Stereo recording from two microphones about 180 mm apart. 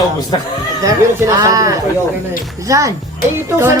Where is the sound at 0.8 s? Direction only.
20° right (ahead or behind).